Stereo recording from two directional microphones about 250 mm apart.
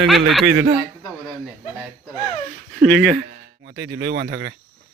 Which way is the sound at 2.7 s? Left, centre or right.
Centre.